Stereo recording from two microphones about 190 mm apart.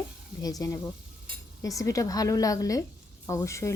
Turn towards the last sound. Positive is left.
turn(degrees=15)  # may be behind; listen again after turning